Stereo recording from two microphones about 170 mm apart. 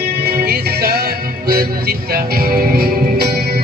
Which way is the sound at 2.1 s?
60° right (ahead or behind).